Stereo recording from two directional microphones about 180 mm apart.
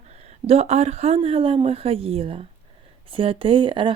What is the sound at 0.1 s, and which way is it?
Speech, 35° right (ahead or behind).